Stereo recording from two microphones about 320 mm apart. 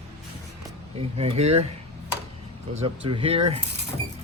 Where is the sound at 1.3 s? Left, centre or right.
Centre.